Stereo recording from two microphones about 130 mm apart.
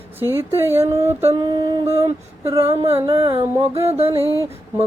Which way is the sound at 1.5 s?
35° right (ahead or behind).